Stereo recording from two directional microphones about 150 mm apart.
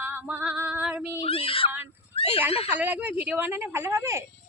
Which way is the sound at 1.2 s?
40° left (ahead or behind).